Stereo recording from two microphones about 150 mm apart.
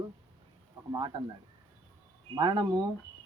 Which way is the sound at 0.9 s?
30° right (ahead or behind).